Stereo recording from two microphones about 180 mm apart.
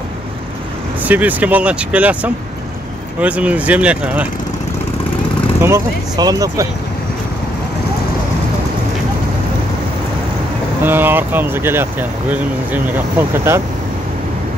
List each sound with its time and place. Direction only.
1.0 s speech: 10° right (ahead or behind)
5.6 s speech: 20° right (ahead or behind)
10.8 s speech: 10° right (ahead or behind)